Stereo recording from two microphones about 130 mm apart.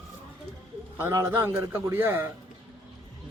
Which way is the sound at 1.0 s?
20° right (ahead or behind).